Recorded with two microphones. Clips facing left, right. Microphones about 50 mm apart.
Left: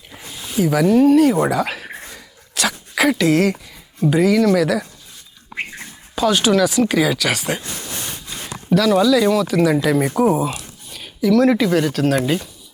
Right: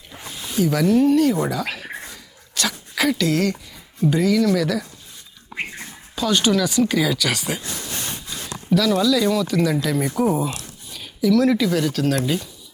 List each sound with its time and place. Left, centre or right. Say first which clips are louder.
0.5 s speech: left 3 dB; centre
1.3 s a sound: left 5 dB; left
3.1 s speech: left 5 dB; centre
6.2 s speech: left 4 dB; centre
8.7 s speech: left 4 dB; left
9.7 s speech: left 5 dB; left